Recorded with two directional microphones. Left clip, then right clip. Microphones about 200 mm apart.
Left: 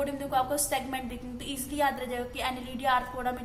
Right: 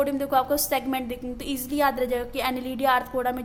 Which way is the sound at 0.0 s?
45° right (ahead or behind).